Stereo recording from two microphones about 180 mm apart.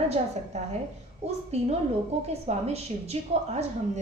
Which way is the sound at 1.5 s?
35° right (ahead or behind).